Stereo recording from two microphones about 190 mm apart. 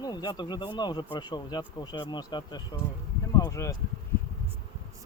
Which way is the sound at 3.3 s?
15° left (ahead or behind).